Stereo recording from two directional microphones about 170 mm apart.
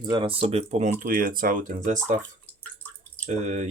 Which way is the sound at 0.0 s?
30° right (ahead or behind).